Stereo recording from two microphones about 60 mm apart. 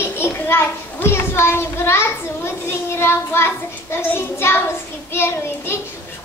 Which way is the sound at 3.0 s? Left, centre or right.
Left.